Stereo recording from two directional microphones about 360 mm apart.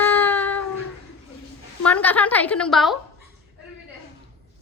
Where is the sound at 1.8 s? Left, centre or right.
Centre.